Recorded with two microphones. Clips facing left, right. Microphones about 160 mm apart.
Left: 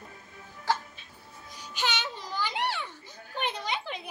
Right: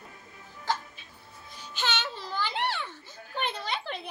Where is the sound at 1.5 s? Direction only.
15° left (ahead or behind).